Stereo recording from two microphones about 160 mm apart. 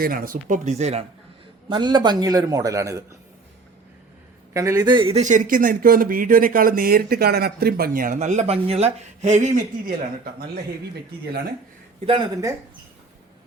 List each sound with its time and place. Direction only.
0.0 s speech: 60° right (ahead or behind); by 1.0 s 45° right (ahead or behind)
1.7 s a man's voice: 30° right (ahead or behind)
4.5 s a man's voice: 20° right (ahead or behind)
5.2 s speech: 55° right (ahead or behind)
11.9 s speech: 35° right (ahead or behind)